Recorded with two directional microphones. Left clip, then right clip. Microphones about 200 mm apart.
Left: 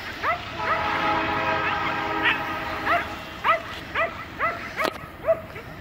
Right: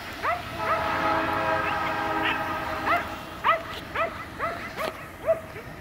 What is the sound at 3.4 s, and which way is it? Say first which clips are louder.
Dog: left 1 dB; 15° left (ahead or behind).